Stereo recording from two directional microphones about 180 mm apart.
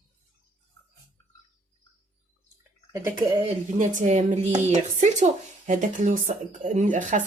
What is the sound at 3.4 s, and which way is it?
Speech, 40° right (ahead or behind).